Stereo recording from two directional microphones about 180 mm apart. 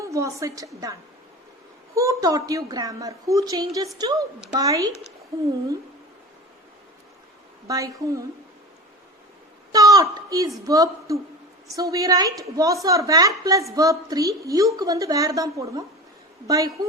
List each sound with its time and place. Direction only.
0.0 s a woman's voice: 15° right (ahead or behind)
2.0 s a woman's voice: 20° right (ahead or behind)
7.7 s a woman's voice: 20° right (ahead or behind)
9.7 s a woman's voice: 20° right (ahead or behind)